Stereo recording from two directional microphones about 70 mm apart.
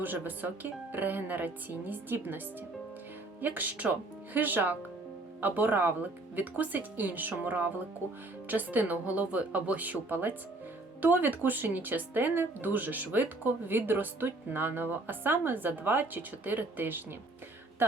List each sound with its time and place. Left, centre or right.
0.0 s speech: right
3.4 s speech: right